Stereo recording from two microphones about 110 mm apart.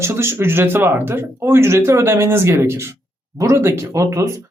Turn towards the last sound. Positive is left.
turn(degrees=-30)  # may be behind; listen again after turning